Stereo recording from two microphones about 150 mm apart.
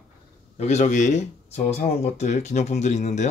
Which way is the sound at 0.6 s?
50° left (ahead or behind).